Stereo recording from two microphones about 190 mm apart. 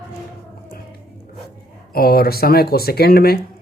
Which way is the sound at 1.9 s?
55° left (ahead or behind).